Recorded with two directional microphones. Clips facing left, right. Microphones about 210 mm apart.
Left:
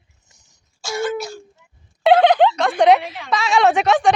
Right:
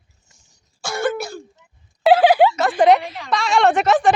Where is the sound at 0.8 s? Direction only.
55° right (ahead or behind).